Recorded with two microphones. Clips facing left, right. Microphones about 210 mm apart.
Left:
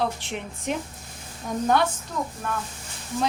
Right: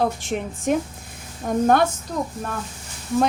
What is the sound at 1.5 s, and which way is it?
Speech, 60° right (ahead or behind).